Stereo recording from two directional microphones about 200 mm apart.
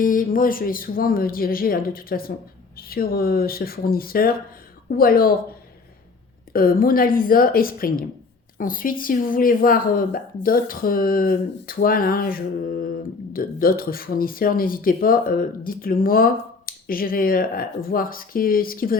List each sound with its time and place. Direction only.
0.0 s speech: 40° left (ahead or behind)
6.5 s speech: 45° left (ahead or behind)